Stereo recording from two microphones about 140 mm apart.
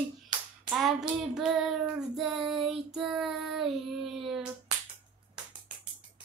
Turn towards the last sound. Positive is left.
turn(degrees=-5)  # may be behind; listen again after turning